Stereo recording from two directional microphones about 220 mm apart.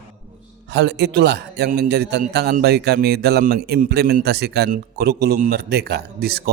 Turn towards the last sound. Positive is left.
turn(degrees=-45)  # may be behind; listen again after turning